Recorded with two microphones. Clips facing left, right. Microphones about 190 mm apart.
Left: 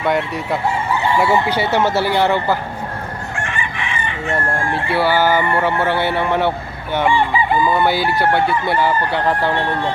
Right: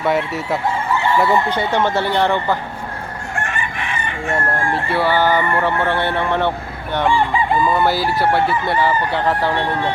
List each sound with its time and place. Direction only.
0.0 s chicken: centre (ahead or behind)
3.5 s chicken: 50° right (ahead or behind)
4.7 s chicken: centre (ahead or behind)